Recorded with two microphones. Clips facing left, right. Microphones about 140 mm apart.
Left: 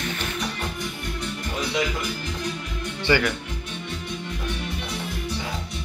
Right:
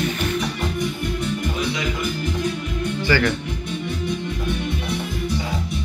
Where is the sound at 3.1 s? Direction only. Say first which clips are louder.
Right 1 dB; 25° left (ahead or behind).